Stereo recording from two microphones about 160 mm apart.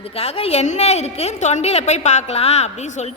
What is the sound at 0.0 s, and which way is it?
A woman's voice, 40° left (ahead or behind).